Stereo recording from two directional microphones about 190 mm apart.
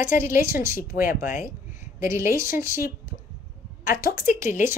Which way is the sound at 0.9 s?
50° left (ahead or behind).